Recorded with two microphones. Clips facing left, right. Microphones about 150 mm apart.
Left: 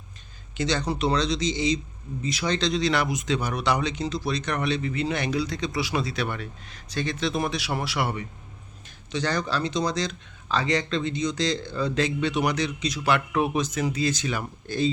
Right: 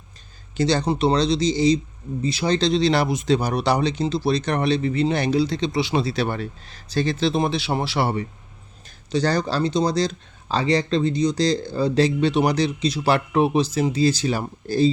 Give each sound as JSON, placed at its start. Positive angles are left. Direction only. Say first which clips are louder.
{"t": 0.5, "sound": "speech", "louder": "right 6 dB", "side_deg": -35}